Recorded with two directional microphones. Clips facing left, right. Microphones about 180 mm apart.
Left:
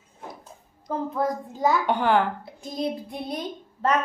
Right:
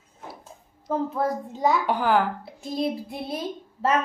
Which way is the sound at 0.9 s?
5° right (ahead or behind).